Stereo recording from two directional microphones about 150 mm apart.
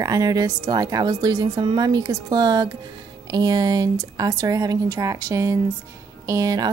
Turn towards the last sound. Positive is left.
turn(degrees=-25)  # may be behind; listen again after turning